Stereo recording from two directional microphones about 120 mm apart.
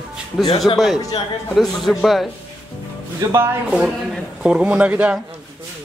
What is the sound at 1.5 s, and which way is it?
Speech, 5° left (ahead or behind).